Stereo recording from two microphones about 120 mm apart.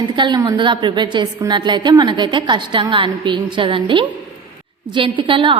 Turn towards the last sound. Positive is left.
turn(degrees=-45)  # may be behind; listen again after turning